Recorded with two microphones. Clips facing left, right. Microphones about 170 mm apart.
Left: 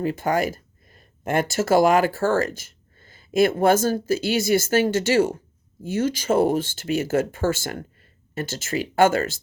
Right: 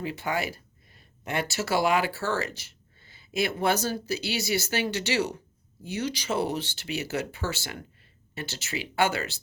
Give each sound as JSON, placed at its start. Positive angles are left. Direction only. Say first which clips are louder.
{"t": 0.0, "sound": "speech", "louder": "left 8 dB", "side_deg": 45}